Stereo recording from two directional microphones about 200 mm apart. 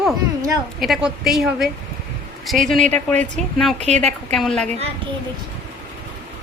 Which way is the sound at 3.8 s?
35° right (ahead or behind).